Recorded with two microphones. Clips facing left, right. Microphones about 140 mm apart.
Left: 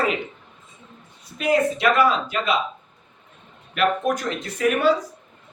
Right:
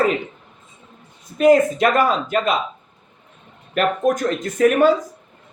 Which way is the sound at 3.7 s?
45° right (ahead or behind).